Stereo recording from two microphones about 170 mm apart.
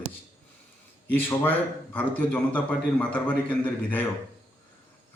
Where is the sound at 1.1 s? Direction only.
10° left (ahead or behind).